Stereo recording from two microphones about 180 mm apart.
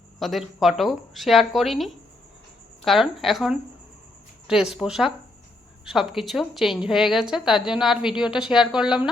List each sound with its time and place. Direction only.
0.2 s a woman's voice: centre (ahead or behind)